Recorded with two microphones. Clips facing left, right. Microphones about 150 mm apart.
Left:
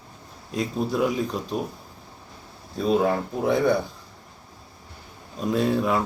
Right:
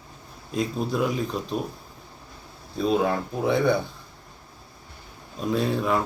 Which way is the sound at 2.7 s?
Centre (ahead or behind).